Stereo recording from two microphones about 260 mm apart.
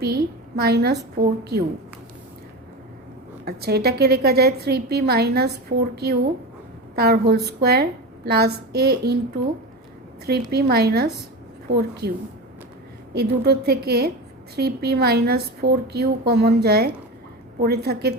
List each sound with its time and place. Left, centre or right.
0.0 s a woman's voice: right
3.4 s a woman's voice: right
10.2 s a woman's voice: right
13.1 s a woman's voice: right